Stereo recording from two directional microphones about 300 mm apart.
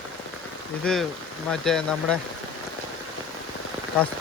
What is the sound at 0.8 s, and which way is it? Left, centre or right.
Speech, centre.